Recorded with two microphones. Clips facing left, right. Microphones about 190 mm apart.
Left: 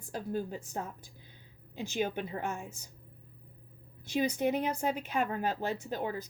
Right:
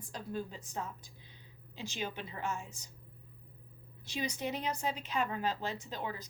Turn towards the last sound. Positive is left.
turn(degrees=50)  # may be behind; listen again after turning